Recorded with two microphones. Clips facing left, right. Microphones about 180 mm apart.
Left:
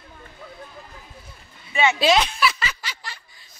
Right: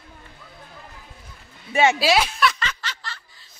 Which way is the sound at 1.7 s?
45° right (ahead or behind).